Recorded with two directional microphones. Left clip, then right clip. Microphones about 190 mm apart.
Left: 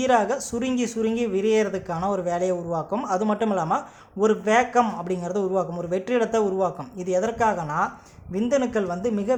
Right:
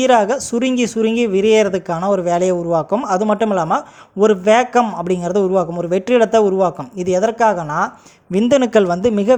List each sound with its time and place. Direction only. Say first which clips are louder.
0.0 s speech: right 8 dB; 35° right (ahead or behind)